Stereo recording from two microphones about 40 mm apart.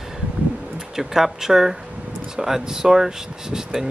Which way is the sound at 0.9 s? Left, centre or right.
Centre.